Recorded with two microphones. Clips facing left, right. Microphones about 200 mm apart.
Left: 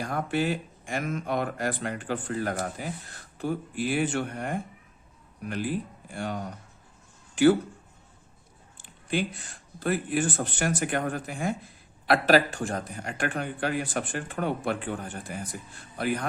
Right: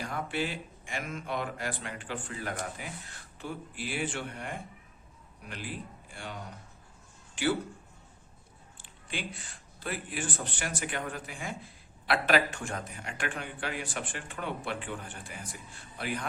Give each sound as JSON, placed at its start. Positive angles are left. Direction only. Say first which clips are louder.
{"t": 0.0, "sound": "speech", "louder": "left 6 dB", "side_deg": 45}
{"t": 8.8, "sound": "a man's voice", "louder": "left 10 dB", "side_deg": 45}